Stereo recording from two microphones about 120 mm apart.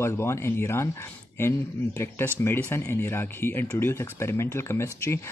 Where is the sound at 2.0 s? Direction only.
20° left (ahead or behind).